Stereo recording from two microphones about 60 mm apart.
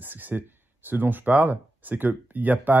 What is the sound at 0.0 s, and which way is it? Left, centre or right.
Speech, right.